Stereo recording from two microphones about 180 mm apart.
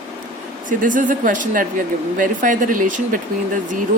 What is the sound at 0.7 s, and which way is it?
Speech, 45° right (ahead or behind).